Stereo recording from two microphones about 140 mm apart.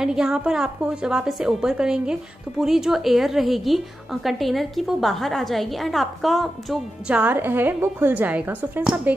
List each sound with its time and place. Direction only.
0.0 s a woman's voice: 5° right (ahead or behind)